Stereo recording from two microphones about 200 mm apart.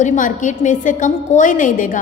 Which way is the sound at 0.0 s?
40° left (ahead or behind).